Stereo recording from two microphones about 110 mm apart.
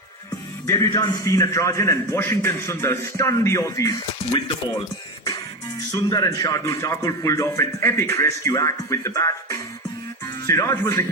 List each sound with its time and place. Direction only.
0.7 s a man's voice: 30° left (ahead or behind)
5.9 s a man's voice: 35° left (ahead or behind)